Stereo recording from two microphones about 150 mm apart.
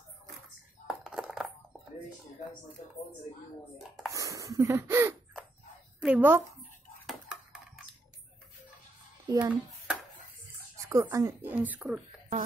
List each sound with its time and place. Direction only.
0.8 s a sound: 5° right (ahead or behind)
3.7 s speech: centre (ahead or behind)
4.1 s a woman's voice: 20° right (ahead or behind)
7.1 s a sound: 5° right (ahead or behind)
9.4 s speech: 10° right (ahead or behind)
10.8 s speech: 20° right (ahead or behind)